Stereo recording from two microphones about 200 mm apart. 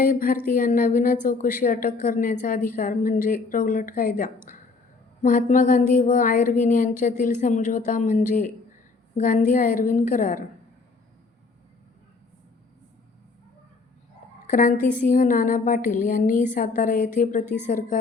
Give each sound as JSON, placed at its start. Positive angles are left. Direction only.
{"t": 0.0, "sound": "speech", "side_deg": 45}
{"t": 14.4, "sound": "a woman's voice", "side_deg": 40}